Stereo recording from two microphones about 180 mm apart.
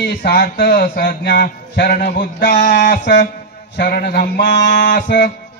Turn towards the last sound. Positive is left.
turn(degrees=50)  # may be behind; listen again after turning